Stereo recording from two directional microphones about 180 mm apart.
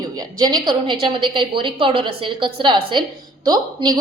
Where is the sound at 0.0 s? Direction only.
20° right (ahead or behind).